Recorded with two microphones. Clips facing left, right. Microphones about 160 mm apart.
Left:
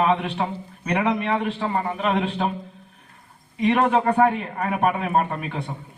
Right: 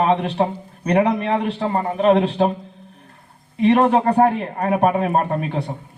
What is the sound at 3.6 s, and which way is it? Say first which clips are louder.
A man's voice: right 4 dB; 35° right (ahead or behind).